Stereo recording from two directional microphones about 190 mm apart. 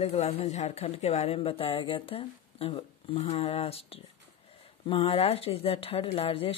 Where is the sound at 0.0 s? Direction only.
35° left (ahead or behind).